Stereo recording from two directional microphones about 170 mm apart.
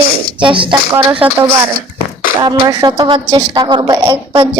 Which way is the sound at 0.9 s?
15° right (ahead or behind).